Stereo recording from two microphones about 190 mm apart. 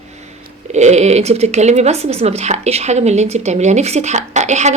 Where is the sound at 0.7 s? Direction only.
35° right (ahead or behind).